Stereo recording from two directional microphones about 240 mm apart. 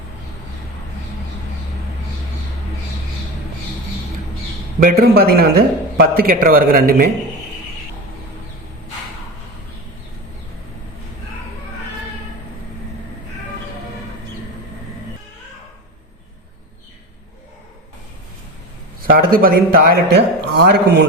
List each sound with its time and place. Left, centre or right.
4.8 s a man's voice: right
19.1 s speech: right